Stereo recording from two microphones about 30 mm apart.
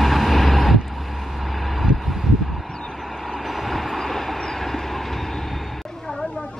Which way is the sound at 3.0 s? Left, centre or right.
Centre.